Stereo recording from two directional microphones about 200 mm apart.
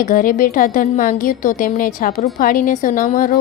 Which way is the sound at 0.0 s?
45° left (ahead or behind).